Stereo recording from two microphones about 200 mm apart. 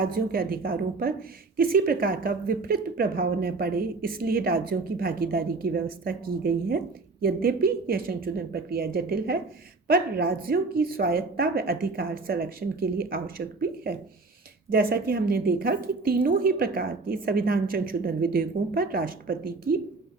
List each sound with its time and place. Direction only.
0.0 s speech: 45° right (ahead or behind)